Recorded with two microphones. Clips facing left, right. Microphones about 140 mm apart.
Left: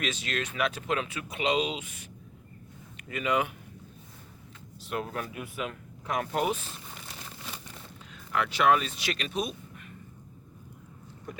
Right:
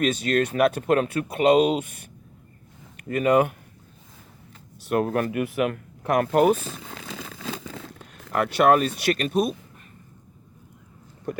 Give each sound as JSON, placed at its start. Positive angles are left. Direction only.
{"t": 0.0, "sound": "speech", "side_deg": -45}
{"t": 4.9, "sound": "speech", "side_deg": -60}
{"t": 8.4, "sound": "speech", "side_deg": -55}